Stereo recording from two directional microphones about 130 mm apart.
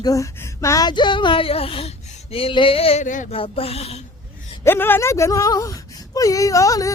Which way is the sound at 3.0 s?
85° left.